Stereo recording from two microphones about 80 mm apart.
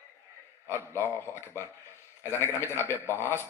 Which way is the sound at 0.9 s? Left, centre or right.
Left.